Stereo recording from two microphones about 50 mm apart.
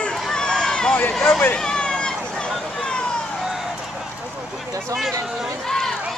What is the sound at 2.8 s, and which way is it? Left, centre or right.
Vehicle, centre.